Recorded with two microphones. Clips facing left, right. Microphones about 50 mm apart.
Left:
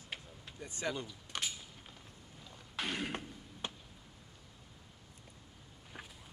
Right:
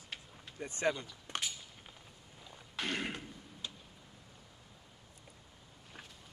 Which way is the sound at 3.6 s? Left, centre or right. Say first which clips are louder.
Left 3 dB; left.